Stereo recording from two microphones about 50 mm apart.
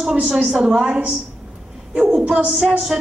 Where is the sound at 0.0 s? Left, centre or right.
Centre.